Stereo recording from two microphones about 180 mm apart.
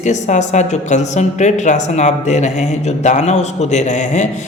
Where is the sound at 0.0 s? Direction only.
40° left (ahead or behind).